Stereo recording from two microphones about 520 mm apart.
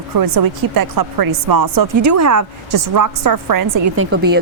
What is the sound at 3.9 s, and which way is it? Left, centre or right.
Speech, right.